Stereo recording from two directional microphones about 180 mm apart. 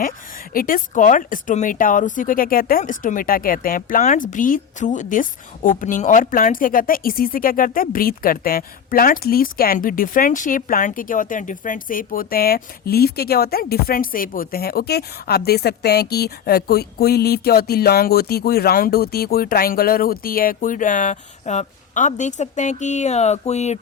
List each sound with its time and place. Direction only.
0.5 s speech: 50° left (ahead or behind)